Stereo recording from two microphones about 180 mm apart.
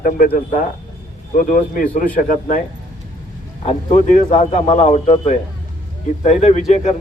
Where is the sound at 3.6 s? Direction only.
45° left (ahead or behind).